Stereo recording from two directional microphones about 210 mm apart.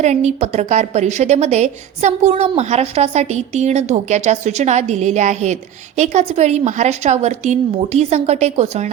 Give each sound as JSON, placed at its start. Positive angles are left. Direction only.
{"t": 0.0, "sound": "a woman's voice", "side_deg": -35}